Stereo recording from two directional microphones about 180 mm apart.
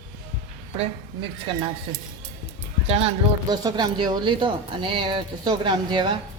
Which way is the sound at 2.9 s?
35° right (ahead or behind).